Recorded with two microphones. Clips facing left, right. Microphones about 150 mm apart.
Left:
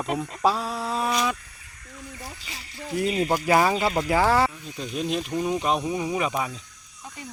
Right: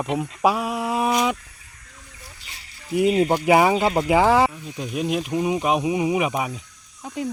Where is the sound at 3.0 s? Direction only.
20° right (ahead or behind).